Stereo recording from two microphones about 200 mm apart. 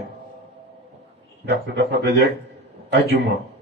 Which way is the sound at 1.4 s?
60° right (ahead or behind).